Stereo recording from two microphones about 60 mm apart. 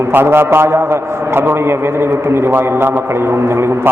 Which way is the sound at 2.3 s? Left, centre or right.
Right.